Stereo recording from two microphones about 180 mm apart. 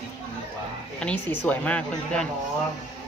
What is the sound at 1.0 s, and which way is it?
Speech, 5° left (ahead or behind).